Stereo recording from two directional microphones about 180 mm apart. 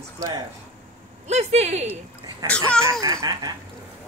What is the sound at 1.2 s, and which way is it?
Speech, 40° right (ahead or behind).